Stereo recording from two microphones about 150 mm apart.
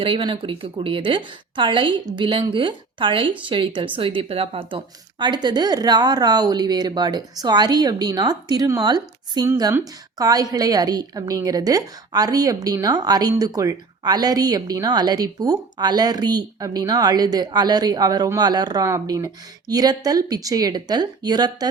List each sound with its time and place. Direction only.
0.0 s a woman's voice: 35° right (ahead or behind)